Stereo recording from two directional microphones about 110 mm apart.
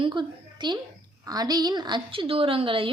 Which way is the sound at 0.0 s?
45° right (ahead or behind).